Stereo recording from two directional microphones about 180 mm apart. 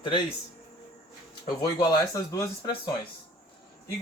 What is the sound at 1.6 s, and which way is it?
Speech, 20° left (ahead or behind).